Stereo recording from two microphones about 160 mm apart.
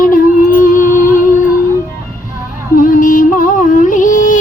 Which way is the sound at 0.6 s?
55° left (ahead or behind).